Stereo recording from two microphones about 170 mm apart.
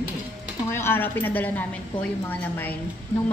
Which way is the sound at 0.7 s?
15° left (ahead or behind).